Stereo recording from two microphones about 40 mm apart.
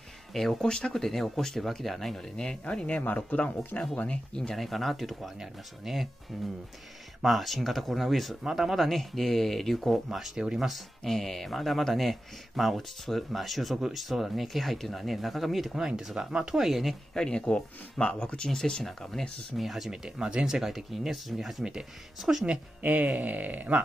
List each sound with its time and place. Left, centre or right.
0.3 s speech: centre
0.7 s speech: centre
1.0 s speech: centre
2.9 s speech: left
3.9 s speech: left
4.4 s speech: centre
10.3 s speech: centre
10.7 s speech: centre
16.1 s speech: centre
16.5 s speech: centre
17.1 s speech: centre
19.5 s speech: centre
19.9 s speech: right
22.8 s speech: right